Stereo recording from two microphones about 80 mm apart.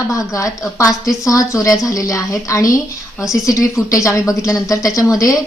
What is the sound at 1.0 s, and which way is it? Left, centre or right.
A woman's voice, left.